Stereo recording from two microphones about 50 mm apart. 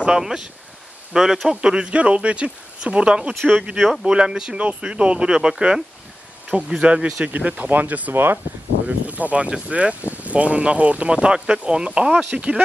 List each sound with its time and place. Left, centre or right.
0.0 s speech: centre
1.6 s speech: centre
3.7 s speech: centre
4.0 s speech: centre; by 8.1 s right
8.1 s speech: right
8.8 s speech: right